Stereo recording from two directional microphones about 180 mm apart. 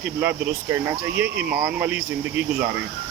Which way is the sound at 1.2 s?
60° right (ahead or behind).